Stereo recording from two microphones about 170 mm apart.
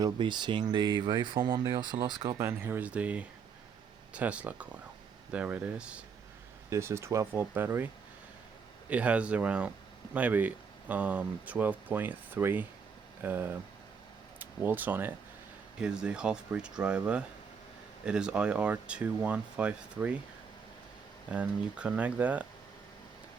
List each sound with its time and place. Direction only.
0.0 s speech: 25° right (ahead or behind)
8.9 s speech: 10° right (ahead or behind)
18.0 s speech: 5° right (ahead or behind)
21.2 s speech: 10° right (ahead or behind)